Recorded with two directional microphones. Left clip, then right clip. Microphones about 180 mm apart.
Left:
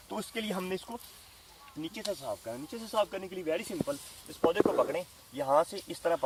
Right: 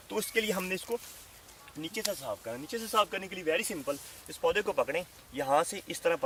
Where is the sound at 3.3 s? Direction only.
20° left (ahead or behind).